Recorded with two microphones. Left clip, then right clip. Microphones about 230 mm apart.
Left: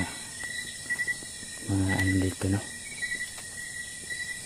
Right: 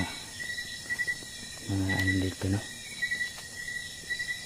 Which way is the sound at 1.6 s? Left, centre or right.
Centre.